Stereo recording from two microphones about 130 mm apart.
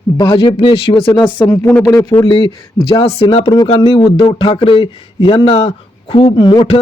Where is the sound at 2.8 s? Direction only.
50° left (ahead or behind).